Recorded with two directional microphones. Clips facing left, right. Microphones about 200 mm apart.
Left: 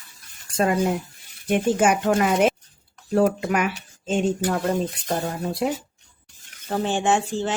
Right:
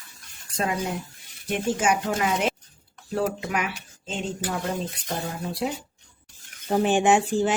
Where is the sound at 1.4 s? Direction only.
55° left (ahead or behind).